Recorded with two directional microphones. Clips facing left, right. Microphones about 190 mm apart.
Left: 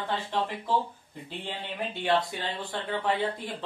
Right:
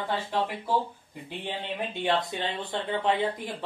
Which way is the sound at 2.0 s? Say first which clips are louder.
Left 1 dB; 20° right (ahead or behind).